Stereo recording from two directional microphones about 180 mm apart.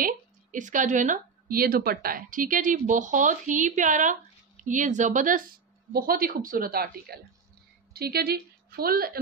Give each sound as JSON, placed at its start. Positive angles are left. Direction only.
{"t": 0.0, "sound": "a woman's voice", "side_deg": -45}